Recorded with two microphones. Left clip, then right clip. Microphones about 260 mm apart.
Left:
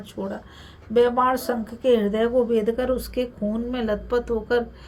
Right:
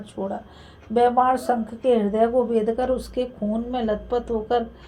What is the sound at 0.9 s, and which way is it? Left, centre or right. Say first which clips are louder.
Speech: right 1 dB; left.